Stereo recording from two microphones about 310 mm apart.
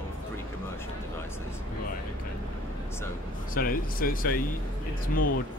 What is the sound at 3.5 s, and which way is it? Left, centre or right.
Speech, left.